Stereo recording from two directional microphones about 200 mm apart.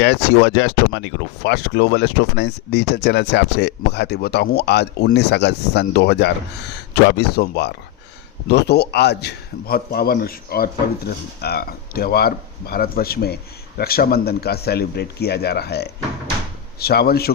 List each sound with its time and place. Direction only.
0.0 s a man's voice: 55° left (ahead or behind)